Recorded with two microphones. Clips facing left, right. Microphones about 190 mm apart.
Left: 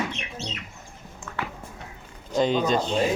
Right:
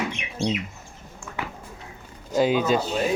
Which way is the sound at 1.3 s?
15° right (ahead or behind).